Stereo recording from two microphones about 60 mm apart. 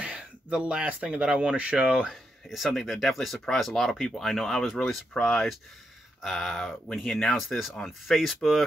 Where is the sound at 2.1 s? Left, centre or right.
Centre.